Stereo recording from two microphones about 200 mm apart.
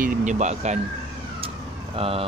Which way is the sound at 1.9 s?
30° right (ahead or behind).